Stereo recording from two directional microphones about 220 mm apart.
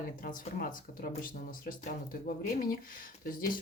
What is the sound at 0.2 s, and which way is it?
Speech, 40° left (ahead or behind).